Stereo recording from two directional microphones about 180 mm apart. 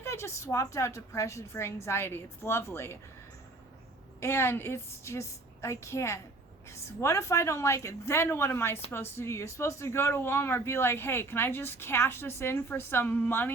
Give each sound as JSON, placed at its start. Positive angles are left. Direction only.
{"t": 0.0, "sound": "speech", "side_deg": 15}
{"t": 4.2, "sound": "speech", "side_deg": 15}